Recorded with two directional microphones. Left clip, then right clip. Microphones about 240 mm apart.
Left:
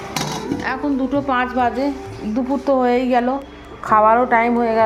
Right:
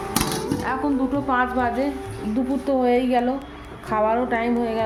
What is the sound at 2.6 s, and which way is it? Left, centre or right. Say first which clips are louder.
Speech: left 4 dB; centre.